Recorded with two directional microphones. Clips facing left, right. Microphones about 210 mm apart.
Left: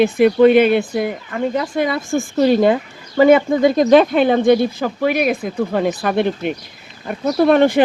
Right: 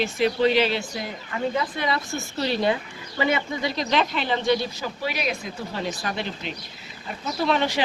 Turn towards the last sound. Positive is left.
turn(degrees=55)  # may be behind; listen again after turning